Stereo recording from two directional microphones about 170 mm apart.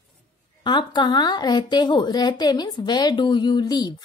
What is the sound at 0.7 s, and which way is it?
A woman's voice, 25° left (ahead or behind).